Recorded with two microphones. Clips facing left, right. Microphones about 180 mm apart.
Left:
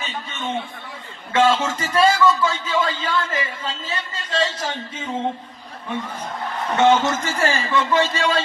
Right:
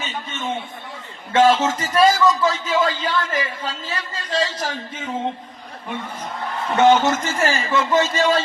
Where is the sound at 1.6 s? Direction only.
30° right (ahead or behind).